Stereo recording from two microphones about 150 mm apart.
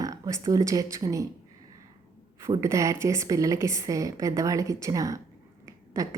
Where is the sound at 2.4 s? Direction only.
20° right (ahead or behind).